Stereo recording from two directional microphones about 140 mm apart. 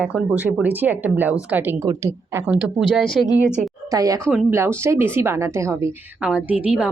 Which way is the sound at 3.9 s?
25° right (ahead or behind).